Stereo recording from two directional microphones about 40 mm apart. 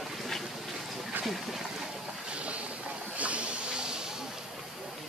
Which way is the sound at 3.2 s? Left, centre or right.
Right.